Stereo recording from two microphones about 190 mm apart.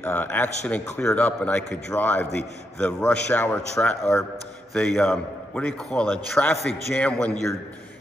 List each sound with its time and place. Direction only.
0.0 s a man's voice: 10° left (ahead or behind)